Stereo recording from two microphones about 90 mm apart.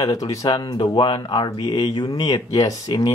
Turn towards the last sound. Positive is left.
turn(degrees=45)  # may be behind; listen again after turning